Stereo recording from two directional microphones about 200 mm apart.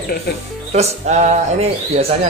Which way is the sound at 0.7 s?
35° right (ahead or behind).